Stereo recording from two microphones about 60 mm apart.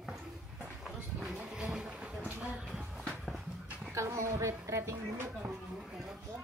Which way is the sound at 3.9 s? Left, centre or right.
Right.